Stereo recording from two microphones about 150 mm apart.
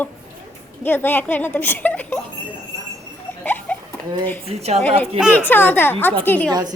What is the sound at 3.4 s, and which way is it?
Rodents, 10° left (ahead or behind).